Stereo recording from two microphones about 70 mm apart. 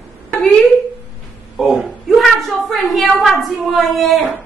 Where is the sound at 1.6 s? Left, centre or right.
Centre.